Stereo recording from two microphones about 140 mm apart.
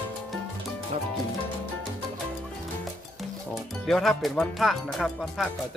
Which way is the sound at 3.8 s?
5° left (ahead or behind).